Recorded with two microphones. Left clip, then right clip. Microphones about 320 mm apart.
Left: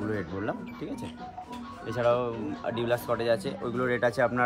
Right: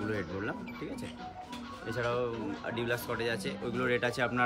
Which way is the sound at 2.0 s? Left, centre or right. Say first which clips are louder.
Left 7 dB; centre.